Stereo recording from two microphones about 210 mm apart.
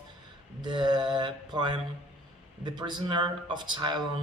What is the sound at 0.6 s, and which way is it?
Mantra, 20° right (ahead or behind).